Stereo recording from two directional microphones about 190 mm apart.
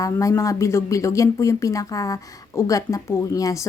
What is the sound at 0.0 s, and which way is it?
Speech, 15° left (ahead or behind).